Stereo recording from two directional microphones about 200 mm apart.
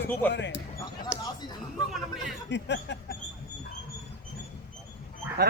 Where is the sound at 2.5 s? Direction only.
60° left (ahead or behind).